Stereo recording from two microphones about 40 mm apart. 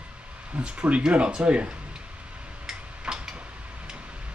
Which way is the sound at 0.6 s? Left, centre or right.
Right.